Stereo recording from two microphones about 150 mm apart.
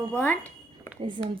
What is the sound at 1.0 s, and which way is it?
Speech, 35° right (ahead or behind).